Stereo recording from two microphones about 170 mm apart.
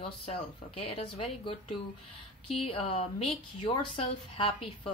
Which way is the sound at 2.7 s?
35° left (ahead or behind).